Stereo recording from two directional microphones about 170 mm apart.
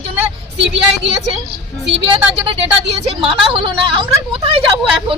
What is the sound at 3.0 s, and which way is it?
A woman's voice, 35° right (ahead or behind).